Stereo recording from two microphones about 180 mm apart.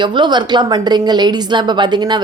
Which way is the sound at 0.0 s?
25° right (ahead or behind).